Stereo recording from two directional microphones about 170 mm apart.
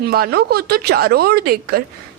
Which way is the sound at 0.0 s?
65° right (ahead or behind).